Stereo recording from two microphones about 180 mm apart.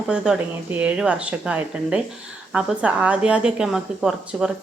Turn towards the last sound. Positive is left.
turn(degrees=-5)  # may be behind; listen again after turning